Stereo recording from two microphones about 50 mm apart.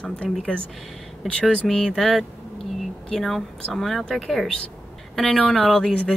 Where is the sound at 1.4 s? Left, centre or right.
Centre.